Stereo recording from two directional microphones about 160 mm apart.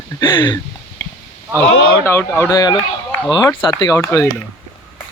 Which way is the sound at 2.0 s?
15° left (ahead or behind).